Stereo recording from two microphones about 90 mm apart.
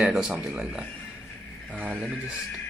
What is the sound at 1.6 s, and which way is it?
Speech, 10° left (ahead or behind).